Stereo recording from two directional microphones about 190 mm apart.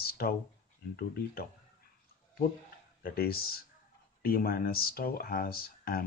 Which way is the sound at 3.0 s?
55° left (ahead or behind).